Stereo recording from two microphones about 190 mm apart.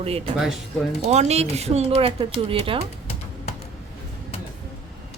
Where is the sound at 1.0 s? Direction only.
35° right (ahead or behind).